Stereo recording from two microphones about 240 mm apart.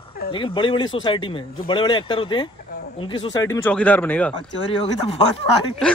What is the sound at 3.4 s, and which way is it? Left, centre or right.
Speech, centre.